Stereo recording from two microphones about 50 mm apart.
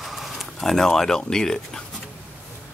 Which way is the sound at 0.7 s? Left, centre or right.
Centre.